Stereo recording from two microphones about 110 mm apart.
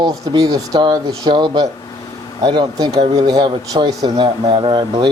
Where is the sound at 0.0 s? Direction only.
35° right (ahead or behind).